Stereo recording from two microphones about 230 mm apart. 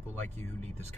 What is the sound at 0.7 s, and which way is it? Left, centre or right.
Speech, right.